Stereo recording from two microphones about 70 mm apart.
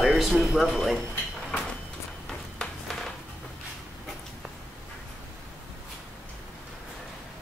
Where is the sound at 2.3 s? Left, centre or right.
Centre.